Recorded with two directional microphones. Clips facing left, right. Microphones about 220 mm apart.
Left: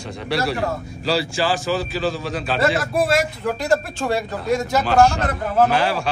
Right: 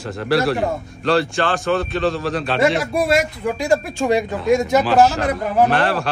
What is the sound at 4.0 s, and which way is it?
Speech, 15° right (ahead or behind).